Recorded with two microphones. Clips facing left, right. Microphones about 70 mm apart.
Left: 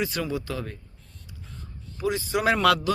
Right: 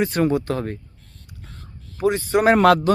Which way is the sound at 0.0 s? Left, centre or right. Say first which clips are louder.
Right 9 dB; right.